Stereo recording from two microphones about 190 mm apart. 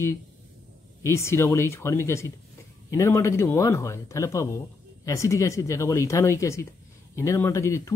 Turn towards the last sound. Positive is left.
turn(degrees=15)  # may be behind; listen again after turning